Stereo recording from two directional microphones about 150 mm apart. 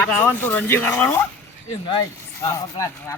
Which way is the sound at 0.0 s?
15° left (ahead or behind).